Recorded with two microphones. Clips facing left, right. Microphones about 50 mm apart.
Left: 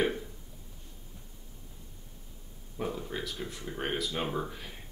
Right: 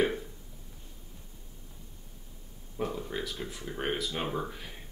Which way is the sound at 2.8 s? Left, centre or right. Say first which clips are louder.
Right 1 dB; centre.